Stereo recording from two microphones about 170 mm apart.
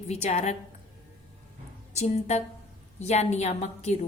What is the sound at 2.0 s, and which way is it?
A woman's voice, 40° left (ahead or behind).